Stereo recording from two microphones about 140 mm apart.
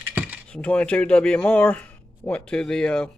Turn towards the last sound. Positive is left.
turn(degrees=5)  # may be behind; listen again after turning